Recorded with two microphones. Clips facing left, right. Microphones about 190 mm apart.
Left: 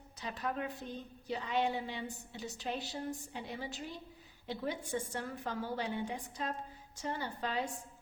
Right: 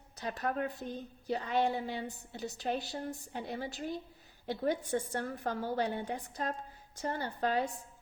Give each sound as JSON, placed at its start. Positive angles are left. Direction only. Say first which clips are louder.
{"t": 0.2, "sound": "a woman's voice", "louder": "right 4 dB", "side_deg": -50}